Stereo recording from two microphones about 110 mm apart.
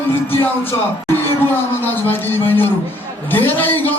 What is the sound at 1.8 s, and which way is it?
A man's voice, 20° left (ahead or behind).